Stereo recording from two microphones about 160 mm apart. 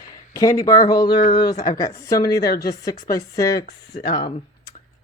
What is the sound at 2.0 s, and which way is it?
Speech, 20° left (ahead or behind).